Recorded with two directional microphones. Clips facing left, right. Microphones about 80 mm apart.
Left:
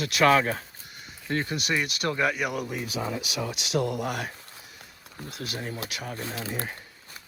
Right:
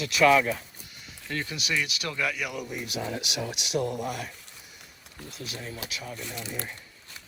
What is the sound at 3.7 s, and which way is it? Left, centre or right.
Speech, left.